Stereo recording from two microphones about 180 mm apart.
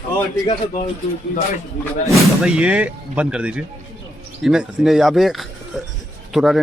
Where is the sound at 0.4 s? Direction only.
45° left (ahead or behind).